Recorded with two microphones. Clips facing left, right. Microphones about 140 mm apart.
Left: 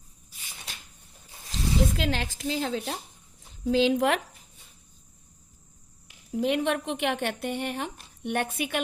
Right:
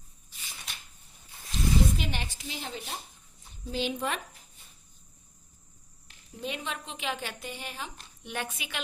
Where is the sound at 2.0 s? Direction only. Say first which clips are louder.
Left 7 dB; 90° left.